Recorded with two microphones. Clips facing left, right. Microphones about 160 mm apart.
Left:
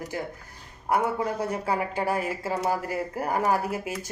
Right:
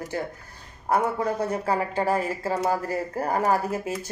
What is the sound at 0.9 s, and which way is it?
Speech, 10° left (ahead or behind).